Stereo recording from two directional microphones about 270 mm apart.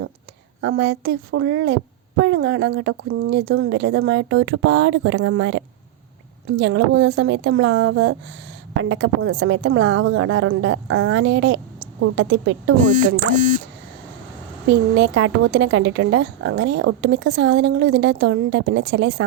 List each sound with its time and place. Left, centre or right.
0.6 s a woman's voice: right
14.7 s speech: right